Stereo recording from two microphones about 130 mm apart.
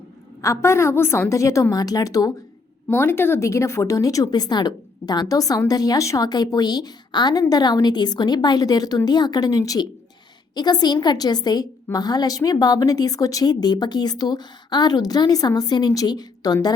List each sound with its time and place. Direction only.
0.4 s a woman's voice: 20° left (ahead or behind)